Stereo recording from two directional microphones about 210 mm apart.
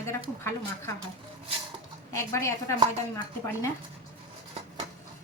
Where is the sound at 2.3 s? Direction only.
15° left (ahead or behind).